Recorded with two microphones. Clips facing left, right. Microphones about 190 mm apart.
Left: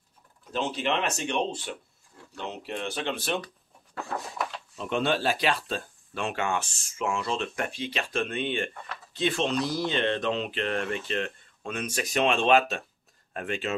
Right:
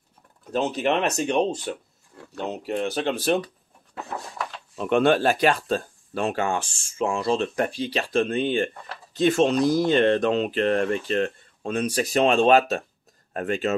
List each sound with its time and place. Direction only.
0.5 s speech: 45° right (ahead or behind)
4.7 s speech: 55° right (ahead or behind)